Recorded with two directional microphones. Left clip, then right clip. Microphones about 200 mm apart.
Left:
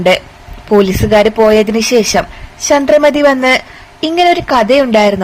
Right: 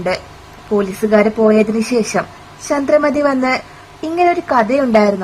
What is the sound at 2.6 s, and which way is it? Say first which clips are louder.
A woman's voice: left 6 dB; 15° left (ahead or behind).